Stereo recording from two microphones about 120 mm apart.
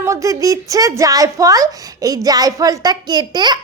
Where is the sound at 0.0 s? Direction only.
25° right (ahead or behind).